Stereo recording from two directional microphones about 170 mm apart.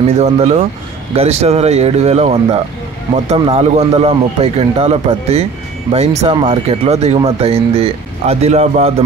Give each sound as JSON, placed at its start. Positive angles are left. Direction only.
{"t": 0.0, "sound": "a man's voice", "side_deg": -40}